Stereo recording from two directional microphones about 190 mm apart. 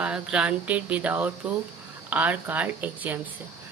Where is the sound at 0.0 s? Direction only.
5° right (ahead or behind).